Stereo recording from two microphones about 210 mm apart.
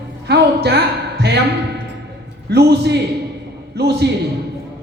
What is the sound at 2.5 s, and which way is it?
Speech, 50° right (ahead or behind).